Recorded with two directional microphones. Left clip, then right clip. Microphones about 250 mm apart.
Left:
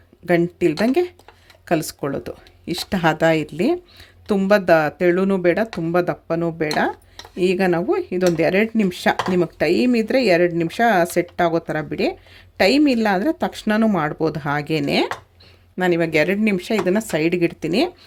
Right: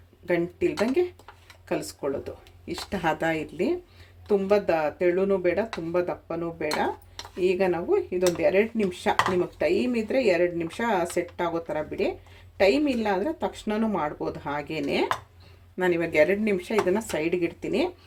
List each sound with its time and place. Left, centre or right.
0.3 s speech: left